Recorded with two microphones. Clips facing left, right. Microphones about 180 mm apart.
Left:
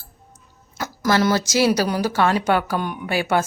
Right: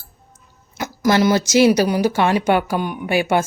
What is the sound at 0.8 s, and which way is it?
A woman's voice, 15° right (ahead or behind).